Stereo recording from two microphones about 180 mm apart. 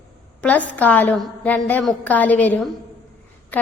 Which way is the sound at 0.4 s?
10° left (ahead or behind).